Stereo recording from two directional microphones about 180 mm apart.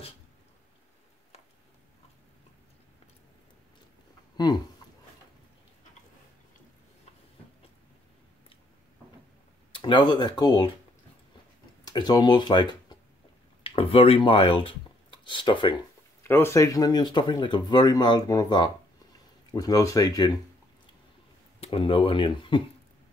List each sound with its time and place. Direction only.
9.7 s speech: 25° left (ahead or behind)
11.8 s speech: 20° left (ahead or behind)
13.7 s speech: 30° left (ahead or behind)
16.2 s speech: 15° left (ahead or behind)
21.5 s speech: 30° left (ahead or behind)